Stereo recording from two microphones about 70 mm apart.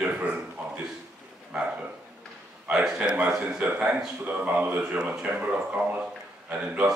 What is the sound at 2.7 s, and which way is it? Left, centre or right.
Speech, centre.